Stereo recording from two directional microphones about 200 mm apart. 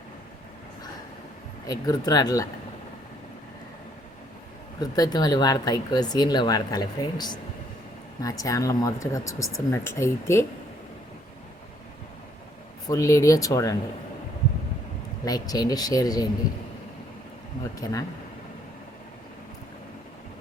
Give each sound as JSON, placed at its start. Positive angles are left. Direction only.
{"t": 1.6, "sound": "speech", "side_deg": 15}
{"t": 4.8, "sound": "speech", "side_deg": 20}
{"t": 12.9, "sound": "speech", "side_deg": 15}
{"t": 15.2, "sound": "speech", "side_deg": 20}